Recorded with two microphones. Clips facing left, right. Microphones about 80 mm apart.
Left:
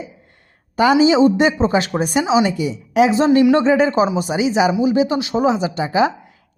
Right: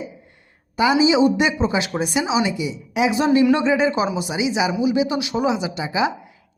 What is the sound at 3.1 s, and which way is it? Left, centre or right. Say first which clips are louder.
Speech: left 1 dB; left.